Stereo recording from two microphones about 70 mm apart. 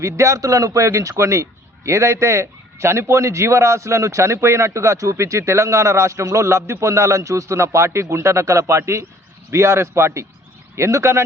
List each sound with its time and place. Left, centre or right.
0.0 s a man's voice: right